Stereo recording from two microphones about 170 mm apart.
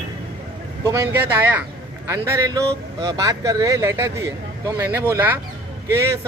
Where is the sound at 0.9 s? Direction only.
15° right (ahead or behind).